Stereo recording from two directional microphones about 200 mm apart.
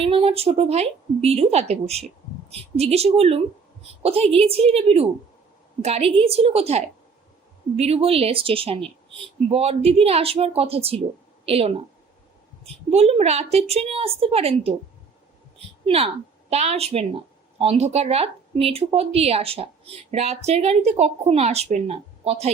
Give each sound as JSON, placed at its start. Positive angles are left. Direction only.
{"t": 0.0, "sound": "a woman's voice", "side_deg": -30}
{"t": 15.5, "sound": "a sound", "side_deg": -30}
{"t": 16.5, "sound": "a woman's voice", "side_deg": -30}